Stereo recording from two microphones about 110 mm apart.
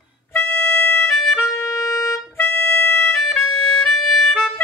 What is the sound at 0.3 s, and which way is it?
Music, 20° left (ahead or behind).